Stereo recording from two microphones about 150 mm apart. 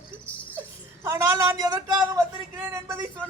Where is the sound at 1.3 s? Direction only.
20° right (ahead or behind).